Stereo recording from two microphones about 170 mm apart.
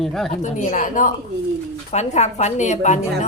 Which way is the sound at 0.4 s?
45° left (ahead or behind).